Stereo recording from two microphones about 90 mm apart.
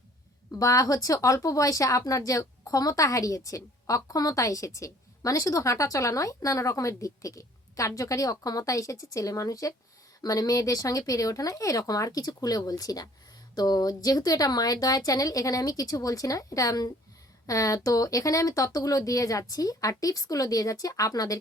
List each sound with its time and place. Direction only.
0.5 s speech: 40° left (ahead or behind)